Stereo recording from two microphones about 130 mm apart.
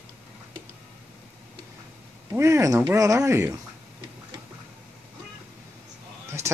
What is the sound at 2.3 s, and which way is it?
Speech, 20° right (ahead or behind).